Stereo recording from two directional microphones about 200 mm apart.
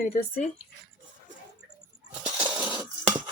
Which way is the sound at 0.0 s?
45° left (ahead or behind).